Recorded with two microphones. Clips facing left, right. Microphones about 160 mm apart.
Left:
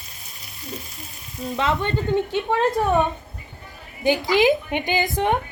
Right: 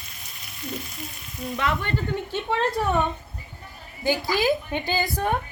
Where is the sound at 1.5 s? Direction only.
20° left (ahead or behind).